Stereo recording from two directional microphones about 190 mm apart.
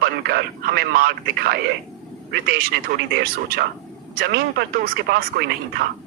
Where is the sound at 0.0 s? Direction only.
55° right (ahead or behind).